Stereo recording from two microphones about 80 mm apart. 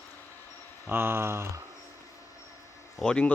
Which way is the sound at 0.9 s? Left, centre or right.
Right.